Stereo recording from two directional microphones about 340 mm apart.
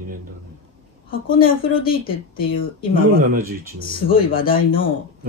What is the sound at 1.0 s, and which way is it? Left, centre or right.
A woman's voice, left.